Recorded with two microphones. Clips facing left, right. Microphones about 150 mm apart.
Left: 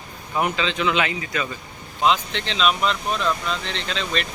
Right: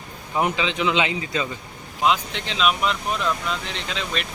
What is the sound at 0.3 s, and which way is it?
Speech, 20° right (ahead or behind).